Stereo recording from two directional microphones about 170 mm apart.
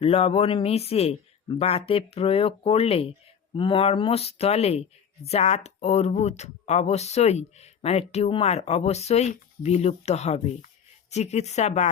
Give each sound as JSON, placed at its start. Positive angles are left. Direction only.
{"t": 0.0, "sound": "speech", "side_deg": 35}